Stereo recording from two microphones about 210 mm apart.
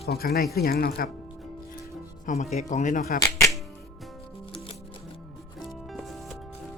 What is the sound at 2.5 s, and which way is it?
Speech, 35° left (ahead or behind).